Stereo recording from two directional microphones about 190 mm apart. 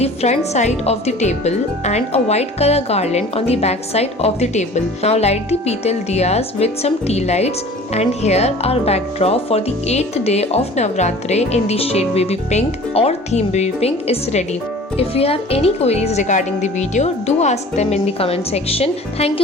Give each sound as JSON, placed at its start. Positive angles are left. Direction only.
{"t": 0.0, "sound": "speech", "side_deg": 35}